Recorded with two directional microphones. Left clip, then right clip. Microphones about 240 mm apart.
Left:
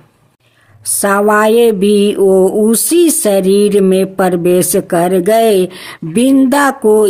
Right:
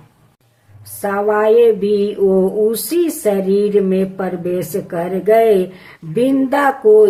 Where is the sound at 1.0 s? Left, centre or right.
Left.